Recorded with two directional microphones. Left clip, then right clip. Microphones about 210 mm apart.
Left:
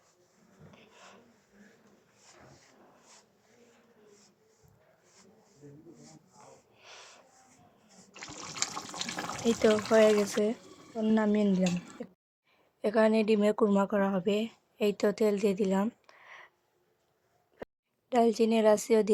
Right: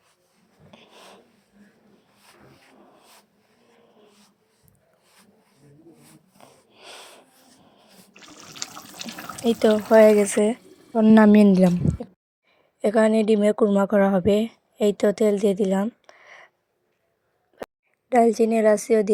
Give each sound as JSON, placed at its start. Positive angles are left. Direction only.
{"t": 0.7, "sound": "a sound", "side_deg": -25}
{"t": 6.7, "sound": "wheeze", "side_deg": -30}
{"t": 9.4, "sound": "speech", "side_deg": -25}
{"t": 10.9, "sound": "a woman's voice", "side_deg": -35}
{"t": 12.8, "sound": "speech", "side_deg": -20}
{"t": 17.6, "sound": "a sound", "side_deg": -20}
{"t": 18.1, "sound": "a woman's voice", "side_deg": -15}